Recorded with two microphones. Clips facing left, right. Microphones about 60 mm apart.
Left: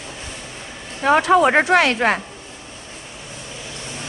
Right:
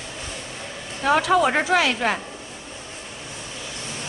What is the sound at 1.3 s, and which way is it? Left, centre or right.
Speech, left.